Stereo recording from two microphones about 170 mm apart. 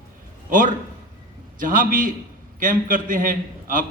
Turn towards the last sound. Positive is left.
turn(degrees=-55)  # may be behind; listen again after turning